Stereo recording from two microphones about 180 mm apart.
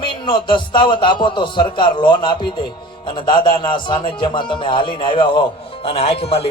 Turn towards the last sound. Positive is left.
turn(degrees=35)  # may be behind; listen again after turning